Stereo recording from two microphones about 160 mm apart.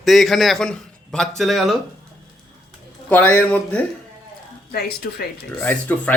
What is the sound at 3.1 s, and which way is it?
Speech, 10° left (ahead or behind).